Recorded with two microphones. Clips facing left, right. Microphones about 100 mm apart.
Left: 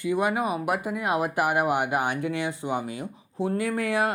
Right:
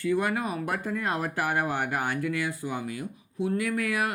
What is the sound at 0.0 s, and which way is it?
Speech, 15° left (ahead or behind).